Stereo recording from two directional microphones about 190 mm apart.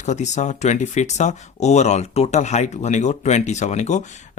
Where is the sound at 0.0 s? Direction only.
40° left (ahead or behind).